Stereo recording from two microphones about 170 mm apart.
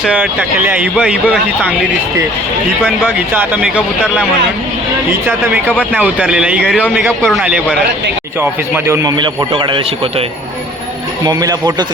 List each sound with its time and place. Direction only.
0.0 s speech: 5° right (ahead or behind)
5.9 s speech: 10° right (ahead or behind)
8.4 s a man's voice: 15° right (ahead or behind); by 10.2 s 30° right (ahead or behind)
11.3 s a man's voice: 20° right (ahead or behind)